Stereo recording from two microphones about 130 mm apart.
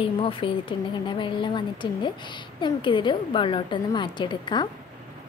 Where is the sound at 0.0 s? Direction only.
40° left (ahead or behind).